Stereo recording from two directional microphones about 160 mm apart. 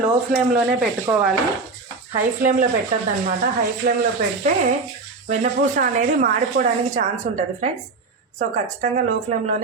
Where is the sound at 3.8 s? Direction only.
70° right (ahead or behind).